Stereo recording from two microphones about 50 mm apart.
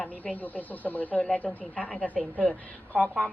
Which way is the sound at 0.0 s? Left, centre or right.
Left.